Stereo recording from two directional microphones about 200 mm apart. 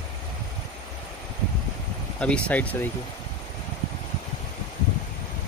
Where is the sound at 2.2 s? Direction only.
5° left (ahead or behind).